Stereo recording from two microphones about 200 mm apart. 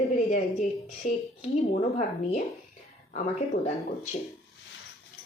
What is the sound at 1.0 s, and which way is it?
Speech, 35° left (ahead or behind).